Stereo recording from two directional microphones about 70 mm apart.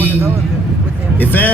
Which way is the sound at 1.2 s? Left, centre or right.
Left.